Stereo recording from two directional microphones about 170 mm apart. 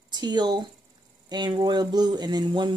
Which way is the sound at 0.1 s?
25° right (ahead or behind).